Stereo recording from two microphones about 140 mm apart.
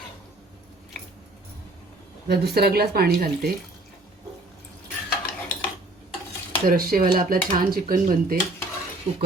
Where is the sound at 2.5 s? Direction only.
90° right.